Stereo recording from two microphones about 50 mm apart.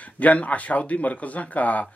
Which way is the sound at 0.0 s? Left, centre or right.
Left.